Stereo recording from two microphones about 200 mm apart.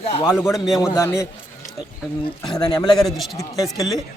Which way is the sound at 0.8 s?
15° left (ahead or behind).